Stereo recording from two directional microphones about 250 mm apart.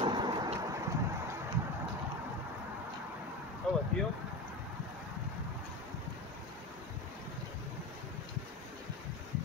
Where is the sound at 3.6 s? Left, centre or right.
Centre.